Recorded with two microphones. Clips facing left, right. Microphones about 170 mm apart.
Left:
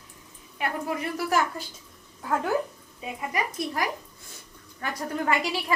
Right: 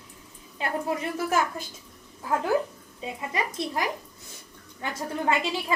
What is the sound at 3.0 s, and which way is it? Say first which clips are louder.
A woman's voice: even; 25° right (ahead or behind).